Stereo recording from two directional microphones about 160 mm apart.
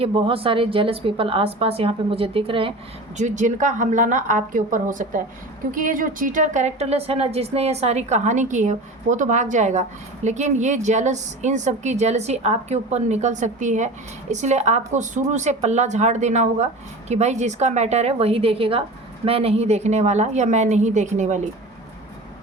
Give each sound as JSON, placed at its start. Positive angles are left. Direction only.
{"t": 0.0, "sound": "a woman's voice", "side_deg": -35}
{"t": 3.2, "sound": "a woman's voice", "side_deg": -50}